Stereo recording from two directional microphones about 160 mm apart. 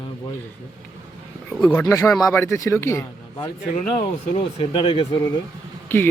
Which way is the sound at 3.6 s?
45° left (ahead or behind).